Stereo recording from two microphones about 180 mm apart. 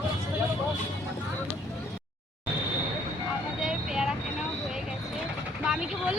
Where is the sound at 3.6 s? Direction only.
5° right (ahead or behind).